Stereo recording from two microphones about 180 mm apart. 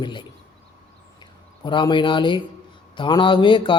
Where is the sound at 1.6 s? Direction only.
25° left (ahead or behind).